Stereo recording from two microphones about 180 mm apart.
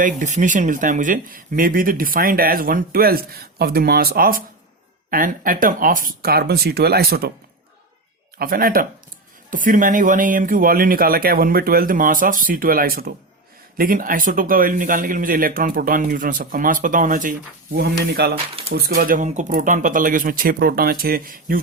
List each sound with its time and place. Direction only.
0.0 s speech: 45° right (ahead or behind); by 7.3 s 60° right (ahead or behind)
8.4 s speech: 55° right (ahead or behind)